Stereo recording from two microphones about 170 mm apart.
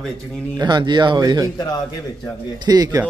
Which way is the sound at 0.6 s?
25° right (ahead or behind).